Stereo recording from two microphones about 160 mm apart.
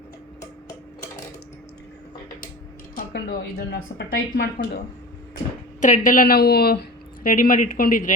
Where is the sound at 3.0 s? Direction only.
70° left (ahead or behind).